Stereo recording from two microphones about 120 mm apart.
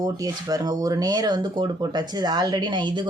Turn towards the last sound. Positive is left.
turn(degrees=-40)  # may be behind; listen again after turning